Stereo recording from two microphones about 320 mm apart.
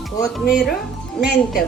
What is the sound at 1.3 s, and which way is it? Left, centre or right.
Speech, left.